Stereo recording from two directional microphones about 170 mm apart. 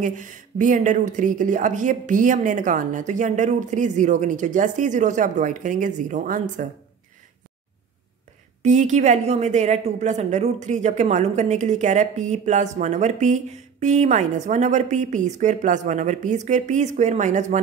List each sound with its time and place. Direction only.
0.0 s a woman's voice: 50° right (ahead or behind)
8.6 s a woman's voice: 45° right (ahead or behind)